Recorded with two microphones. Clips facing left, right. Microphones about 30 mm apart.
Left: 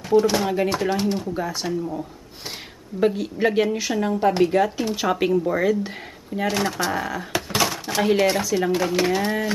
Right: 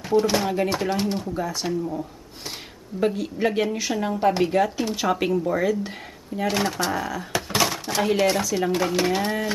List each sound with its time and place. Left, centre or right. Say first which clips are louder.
0.0 s speech: left 2 dB; centre
1.3 s a woman's voice: left 1 dB; centre
1.6 s a woman's voice: even; centre
6.4 s speech: left 1 dB; centre
7.4 s speech: right 1 dB; centre